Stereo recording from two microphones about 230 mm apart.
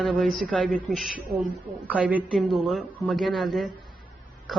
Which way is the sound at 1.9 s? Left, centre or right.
Centre.